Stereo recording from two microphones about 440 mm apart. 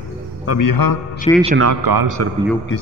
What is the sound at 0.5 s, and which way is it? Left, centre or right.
Speech, left.